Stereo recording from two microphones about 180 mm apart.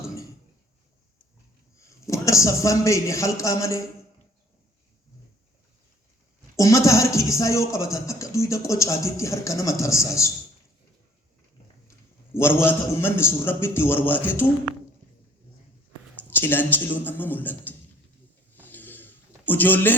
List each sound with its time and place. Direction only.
1.8 s a man's voice: 15° left (ahead or behind)
6.6 s speech: 15° left (ahead or behind)
12.4 s speech: 15° left (ahead or behind)
16.3 s speech: 10° left (ahead or behind)
18.6 s a sound: 10° left (ahead or behind)